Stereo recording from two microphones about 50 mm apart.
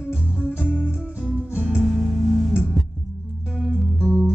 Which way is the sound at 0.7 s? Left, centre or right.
Centre.